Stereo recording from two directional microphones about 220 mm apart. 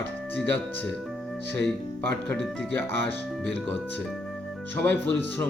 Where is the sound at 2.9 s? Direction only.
55° right (ahead or behind).